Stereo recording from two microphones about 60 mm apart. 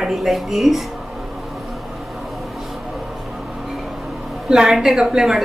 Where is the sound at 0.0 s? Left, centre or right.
Centre.